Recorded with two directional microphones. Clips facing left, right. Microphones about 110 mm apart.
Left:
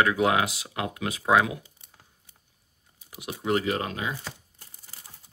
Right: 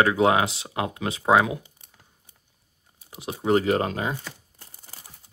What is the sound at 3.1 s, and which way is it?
Speech, 30° right (ahead or behind).